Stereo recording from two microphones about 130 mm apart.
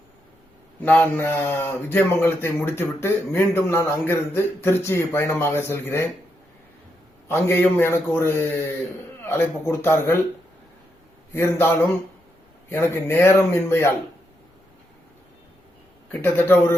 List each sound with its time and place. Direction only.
0.8 s a man's voice: 10° left (ahead or behind)
7.3 s a man's voice: 15° left (ahead or behind)
11.3 s a man's voice: 20° left (ahead or behind)
16.2 s a man's voice: 15° left (ahead or behind)